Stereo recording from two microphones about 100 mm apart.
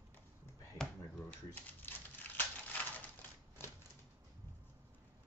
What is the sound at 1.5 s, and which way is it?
Typewriter, 20° left (ahead or behind).